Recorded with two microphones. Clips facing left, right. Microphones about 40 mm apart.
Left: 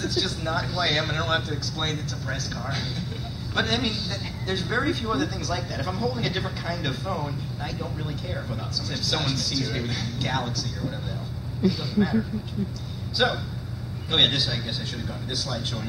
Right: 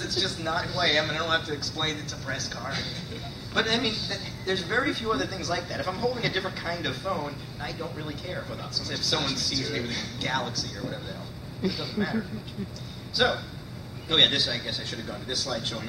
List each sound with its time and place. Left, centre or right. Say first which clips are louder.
0.0 s a woman's voice: left 2 dB; centre